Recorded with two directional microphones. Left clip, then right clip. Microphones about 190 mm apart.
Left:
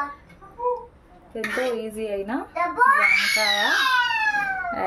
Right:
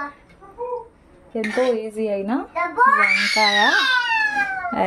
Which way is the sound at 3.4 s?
40° right (ahead or behind).